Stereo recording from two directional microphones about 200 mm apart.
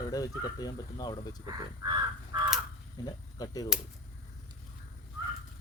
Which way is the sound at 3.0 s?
20° left (ahead or behind).